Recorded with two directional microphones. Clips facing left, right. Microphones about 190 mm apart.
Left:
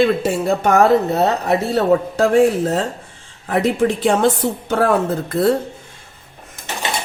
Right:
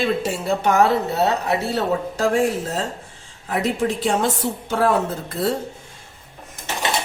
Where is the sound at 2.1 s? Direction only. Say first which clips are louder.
Left 4 dB; 60° left (ahead or behind).